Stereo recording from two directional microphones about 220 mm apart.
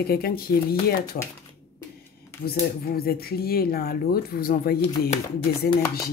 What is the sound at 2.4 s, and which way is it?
Speech, 45° left (ahead or behind).